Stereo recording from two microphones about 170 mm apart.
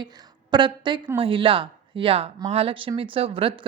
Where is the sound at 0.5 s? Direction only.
25° right (ahead or behind).